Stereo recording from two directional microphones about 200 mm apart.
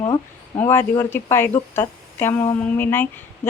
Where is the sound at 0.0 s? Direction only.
20° left (ahead or behind).